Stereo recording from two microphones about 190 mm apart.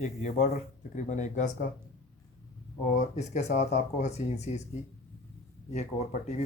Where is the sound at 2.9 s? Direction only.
40° left (ahead or behind).